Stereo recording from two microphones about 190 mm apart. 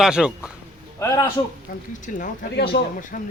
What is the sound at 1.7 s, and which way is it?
Speech, 50° left (ahead or behind).